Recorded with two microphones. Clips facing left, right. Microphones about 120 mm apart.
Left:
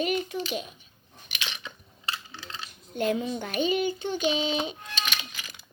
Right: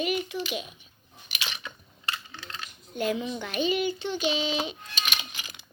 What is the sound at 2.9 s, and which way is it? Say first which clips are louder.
A child's voice: left 2 dB; 45° left (ahead or behind).